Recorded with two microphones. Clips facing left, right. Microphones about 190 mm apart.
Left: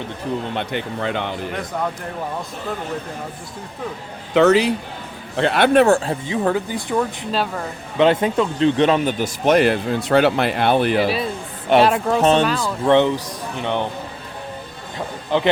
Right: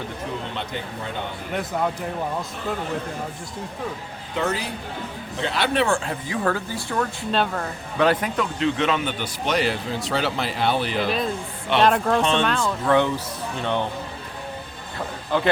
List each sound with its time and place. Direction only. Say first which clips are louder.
0.5 s speech: left 6 dB; 65° left (ahead or behind); by 1.4 s 90° left
4.4 s speech: left 12 dB; 80° left
5.4 s speech: left 8 dB; 60° left (ahead or behind); by 6.1 s 40° left (ahead or behind)
6.2 s speech: left 4 dB; 20° left (ahead or behind)
7.3 s speech: even; 5° left (ahead or behind)
7.9 s speech: left 5 dB; 25° left (ahead or behind); by 11.0 s 55° left (ahead or behind)
11.0 s speech: left 3 dB; 5° left (ahead or behind)
12.8 s speech: left 6 dB; 25° left (ahead or behind)
15.3 s speech: left 3 dB; 20° left (ahead or behind)